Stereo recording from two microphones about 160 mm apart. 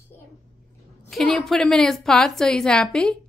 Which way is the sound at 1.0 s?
Centre (ahead or behind).